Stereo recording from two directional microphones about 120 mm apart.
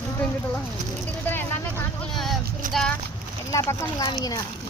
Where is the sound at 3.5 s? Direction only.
30° left (ahead or behind).